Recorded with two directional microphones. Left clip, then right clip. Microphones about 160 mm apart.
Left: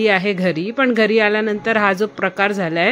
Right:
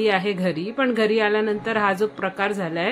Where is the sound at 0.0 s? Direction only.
30° left (ahead or behind).